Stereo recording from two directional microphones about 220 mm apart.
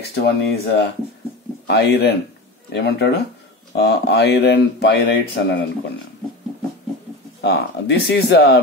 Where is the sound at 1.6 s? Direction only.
50° left (ahead or behind).